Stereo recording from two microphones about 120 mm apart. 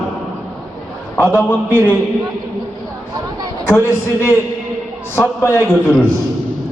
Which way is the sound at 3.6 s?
20° left (ahead or behind).